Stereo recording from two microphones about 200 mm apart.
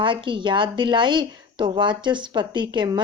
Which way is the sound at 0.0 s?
25° right (ahead or behind).